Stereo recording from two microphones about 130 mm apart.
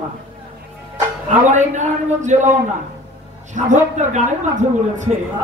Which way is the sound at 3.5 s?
70° right (ahead or behind).